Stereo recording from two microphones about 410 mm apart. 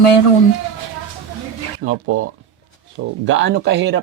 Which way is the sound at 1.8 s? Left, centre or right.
Right.